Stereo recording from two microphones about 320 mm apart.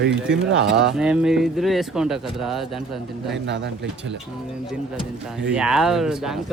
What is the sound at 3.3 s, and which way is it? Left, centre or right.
Speech, right.